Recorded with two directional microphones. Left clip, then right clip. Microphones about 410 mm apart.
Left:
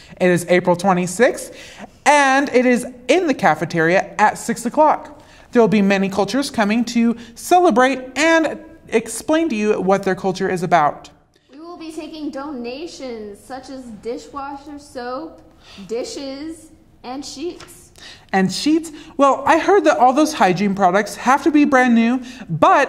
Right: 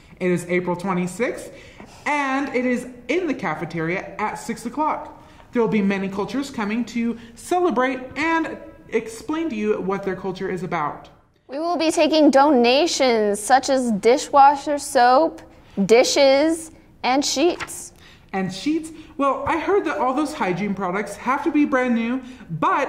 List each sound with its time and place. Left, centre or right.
0.2 s speech: left
11.5 s a woman's voice: right
18.3 s speech: left